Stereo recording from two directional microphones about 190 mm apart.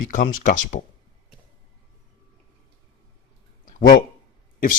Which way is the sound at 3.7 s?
45° left (ahead or behind).